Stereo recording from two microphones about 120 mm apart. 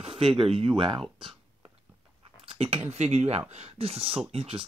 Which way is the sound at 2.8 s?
70° right (ahead or behind).